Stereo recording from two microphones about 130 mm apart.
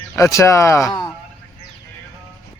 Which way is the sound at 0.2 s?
25° left (ahead or behind).